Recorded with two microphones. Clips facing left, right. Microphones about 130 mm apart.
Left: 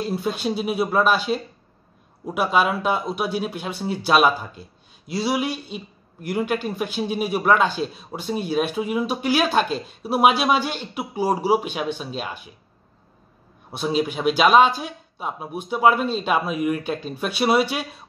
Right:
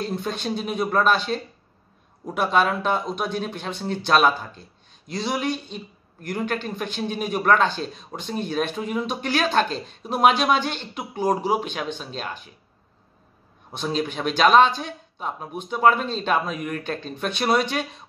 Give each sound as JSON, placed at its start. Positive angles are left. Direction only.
{"t": 0.0, "sound": "a man's voice", "side_deg": 5}
{"t": 13.7, "sound": "a man's voice", "side_deg": 10}